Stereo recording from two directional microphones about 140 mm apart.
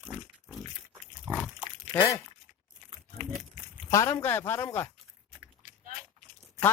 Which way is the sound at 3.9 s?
25° left (ahead or behind).